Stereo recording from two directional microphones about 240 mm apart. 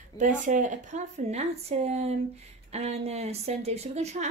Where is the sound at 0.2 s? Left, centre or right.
Right.